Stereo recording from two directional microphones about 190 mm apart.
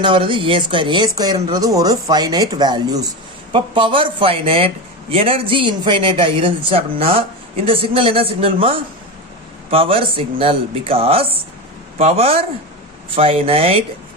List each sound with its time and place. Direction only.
0.0 s a man's voice: 25° right (ahead or behind)